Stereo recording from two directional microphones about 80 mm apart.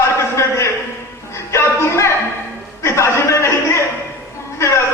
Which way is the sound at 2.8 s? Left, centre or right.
Left.